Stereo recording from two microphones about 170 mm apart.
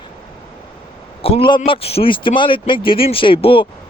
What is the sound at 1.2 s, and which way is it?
Speech, 35° left (ahead or behind).